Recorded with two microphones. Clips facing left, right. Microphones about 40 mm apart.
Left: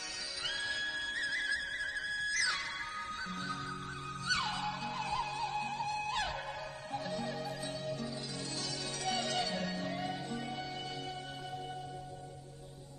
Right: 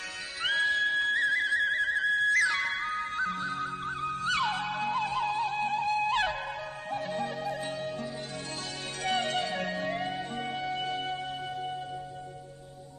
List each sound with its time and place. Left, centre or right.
0.4 s music: right
1.3 s music: right
1.6 s music: right